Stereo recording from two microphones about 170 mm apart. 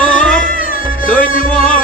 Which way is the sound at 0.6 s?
55° left (ahead or behind).